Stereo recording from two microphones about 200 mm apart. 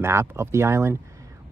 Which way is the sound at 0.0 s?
15° right (ahead or behind).